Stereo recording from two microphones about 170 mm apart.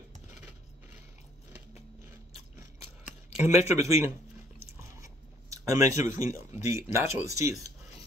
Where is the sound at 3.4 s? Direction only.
15° right (ahead or behind).